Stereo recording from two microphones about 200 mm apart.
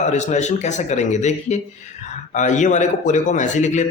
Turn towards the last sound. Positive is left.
turn(degrees=35)  # may be behind; listen again after turning